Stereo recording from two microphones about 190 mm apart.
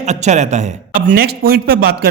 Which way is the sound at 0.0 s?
35° right (ahead or behind).